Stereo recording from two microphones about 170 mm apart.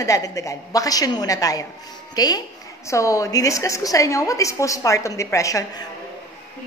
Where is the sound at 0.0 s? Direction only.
20° left (ahead or behind).